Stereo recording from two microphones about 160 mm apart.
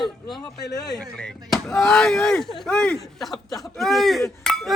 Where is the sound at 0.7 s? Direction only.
25° left (ahead or behind).